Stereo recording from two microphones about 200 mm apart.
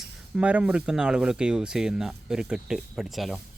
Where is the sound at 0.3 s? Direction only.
5° right (ahead or behind).